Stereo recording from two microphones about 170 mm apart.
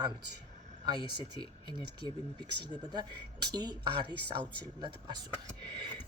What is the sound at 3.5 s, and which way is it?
Speech, 25° right (ahead or behind).